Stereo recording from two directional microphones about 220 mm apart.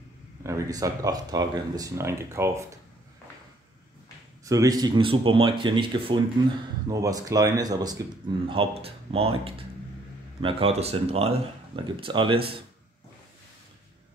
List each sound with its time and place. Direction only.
0.4 s speech: 15° right (ahead or behind)
4.5 s speech: 15° right (ahead or behind)